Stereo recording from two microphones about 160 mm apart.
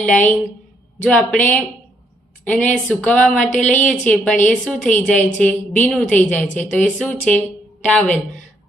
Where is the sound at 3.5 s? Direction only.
50° left (ahead or behind).